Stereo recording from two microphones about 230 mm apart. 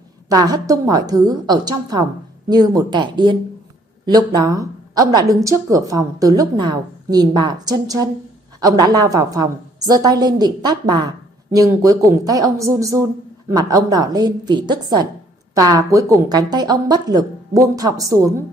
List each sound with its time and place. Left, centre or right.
0.3 s a woman's voice: centre